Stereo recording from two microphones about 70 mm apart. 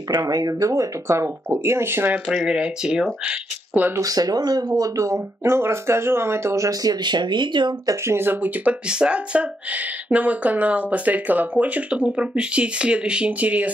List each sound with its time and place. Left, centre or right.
0.3 s speech: right
2.2 s speech: centre
3.3 s speech: right
4.0 s speech: right
5.4 s speech: right
7.9 s speech: right